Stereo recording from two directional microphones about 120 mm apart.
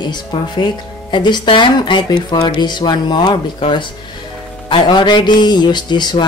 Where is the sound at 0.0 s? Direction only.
40° left (ahead or behind).